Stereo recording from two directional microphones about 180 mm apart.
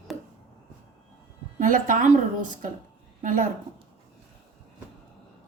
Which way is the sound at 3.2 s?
50° right (ahead or behind).